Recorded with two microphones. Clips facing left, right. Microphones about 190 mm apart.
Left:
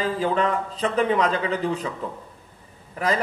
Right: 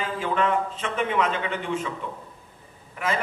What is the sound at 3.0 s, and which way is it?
Speech, 35° left (ahead or behind).